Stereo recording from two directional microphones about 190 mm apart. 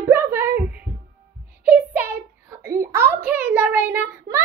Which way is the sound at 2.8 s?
15° right (ahead or behind).